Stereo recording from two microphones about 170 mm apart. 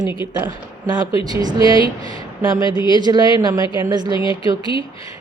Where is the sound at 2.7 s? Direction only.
25° left (ahead or behind).